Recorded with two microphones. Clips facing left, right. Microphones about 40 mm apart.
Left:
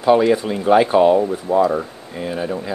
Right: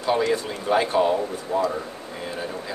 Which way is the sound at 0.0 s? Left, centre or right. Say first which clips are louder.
Left 8 dB; centre.